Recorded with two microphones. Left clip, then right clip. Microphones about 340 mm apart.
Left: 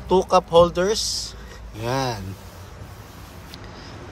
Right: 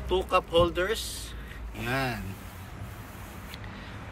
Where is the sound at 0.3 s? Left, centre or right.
Centre.